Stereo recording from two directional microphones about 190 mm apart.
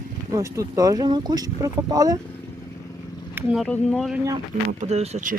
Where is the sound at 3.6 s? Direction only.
5° left (ahead or behind).